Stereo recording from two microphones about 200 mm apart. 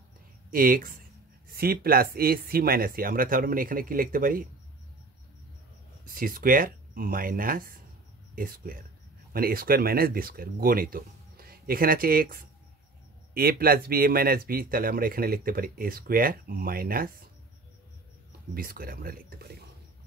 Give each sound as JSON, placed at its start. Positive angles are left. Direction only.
{"t": 0.5, "sound": "speech", "side_deg": -45}
{"t": 6.0, "sound": "speech", "side_deg": -45}
{"t": 18.5, "sound": "speech", "side_deg": -45}